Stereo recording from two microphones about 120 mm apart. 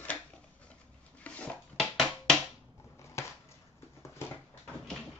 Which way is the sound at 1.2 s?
10° left (ahead or behind).